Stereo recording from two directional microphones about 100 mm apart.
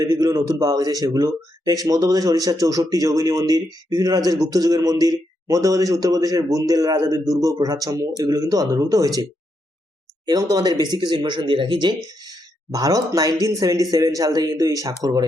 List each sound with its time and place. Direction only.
0.0 s speech: 35° right (ahead or behind)
10.2 s speech: 40° right (ahead or behind)
12.2 s speech: 40° right (ahead or behind)